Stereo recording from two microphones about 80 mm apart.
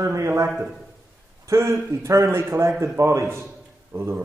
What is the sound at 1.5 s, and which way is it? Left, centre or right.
A man's voice, right.